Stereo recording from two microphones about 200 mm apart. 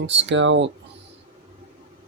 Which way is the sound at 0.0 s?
65° right (ahead or behind).